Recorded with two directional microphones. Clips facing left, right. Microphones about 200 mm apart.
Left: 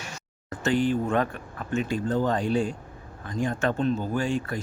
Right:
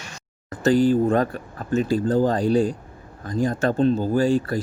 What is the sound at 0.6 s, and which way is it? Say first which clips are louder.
Speech: right 7 dB; 35° right (ahead or behind).